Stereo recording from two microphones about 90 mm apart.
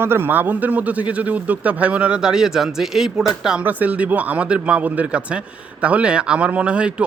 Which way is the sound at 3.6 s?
15° right (ahead or behind).